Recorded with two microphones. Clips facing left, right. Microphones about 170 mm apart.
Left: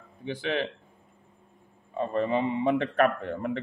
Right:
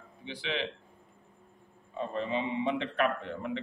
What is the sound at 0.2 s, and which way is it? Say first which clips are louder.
Speech: left 6 dB; 50° left (ahead or behind).